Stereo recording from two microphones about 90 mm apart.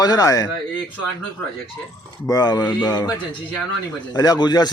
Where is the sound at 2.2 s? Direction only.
45° left (ahead or behind).